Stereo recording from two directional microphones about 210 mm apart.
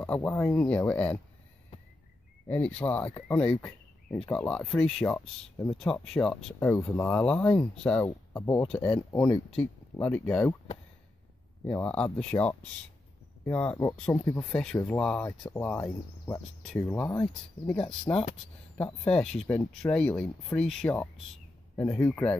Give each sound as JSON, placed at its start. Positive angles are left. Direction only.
{"t": 0.0, "sound": "speech", "side_deg": 5}
{"t": 2.4, "sound": "speech", "side_deg": 5}
{"t": 11.6, "sound": "speech", "side_deg": 5}